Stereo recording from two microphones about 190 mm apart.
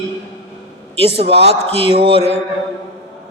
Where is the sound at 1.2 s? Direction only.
30° right (ahead or behind).